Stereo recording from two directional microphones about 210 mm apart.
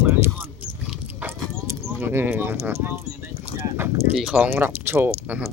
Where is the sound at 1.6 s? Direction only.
10° right (ahead or behind).